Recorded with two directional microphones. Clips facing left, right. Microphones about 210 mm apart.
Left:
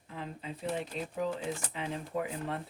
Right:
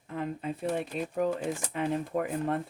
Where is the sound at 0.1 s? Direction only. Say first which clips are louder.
Right 8 dB; 55° right (ahead or behind).